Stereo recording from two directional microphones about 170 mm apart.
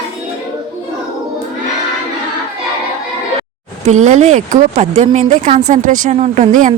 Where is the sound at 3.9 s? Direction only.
45° right (ahead or behind).